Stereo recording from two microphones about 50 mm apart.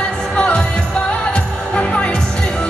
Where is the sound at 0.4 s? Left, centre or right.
Left.